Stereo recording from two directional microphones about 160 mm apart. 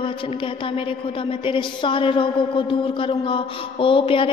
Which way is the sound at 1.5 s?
30° left (ahead or behind).